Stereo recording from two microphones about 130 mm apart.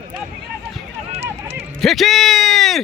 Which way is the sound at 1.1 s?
55° right (ahead or behind).